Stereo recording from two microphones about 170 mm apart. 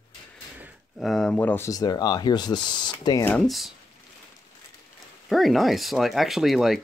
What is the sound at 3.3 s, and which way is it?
Speech, 5° left (ahead or behind).